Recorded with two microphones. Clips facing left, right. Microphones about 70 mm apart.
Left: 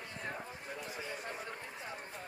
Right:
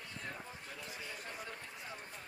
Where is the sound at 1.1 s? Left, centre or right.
Centre.